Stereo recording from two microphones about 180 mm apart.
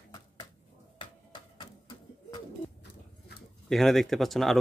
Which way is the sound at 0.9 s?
25° left (ahead or behind).